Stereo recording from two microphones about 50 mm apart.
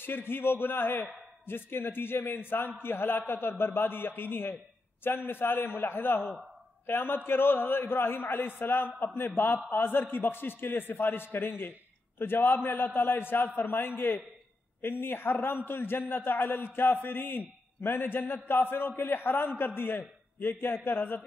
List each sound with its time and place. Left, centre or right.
0.0 s a man's voice: left